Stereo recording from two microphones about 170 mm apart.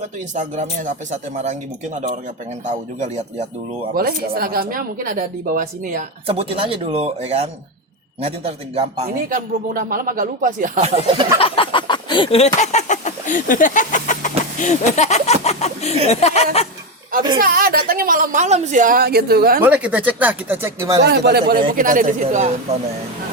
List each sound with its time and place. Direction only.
0.3 s speech: 45° right (ahead or behind)
2.6 s speech: 45° right (ahead or behind)
3.9 s a woman's voice: 60° right (ahead or behind)
6.2 s speech: 30° right (ahead or behind)
9.3 s speech: 55° right (ahead or behind); by 11.3 s 35° right (ahead or behind)
11.3 s speech: 30° left (ahead or behind)
17.4 s a woman's voice: 60° right (ahead or behind)
19.6 s speech: 10° right (ahead or behind)
21.0 s speech: 70° right (ahead or behind); by 22.8 s 40° right (ahead or behind)